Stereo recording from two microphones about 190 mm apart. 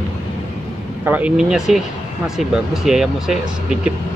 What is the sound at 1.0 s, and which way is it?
Speech, 10° right (ahead or behind).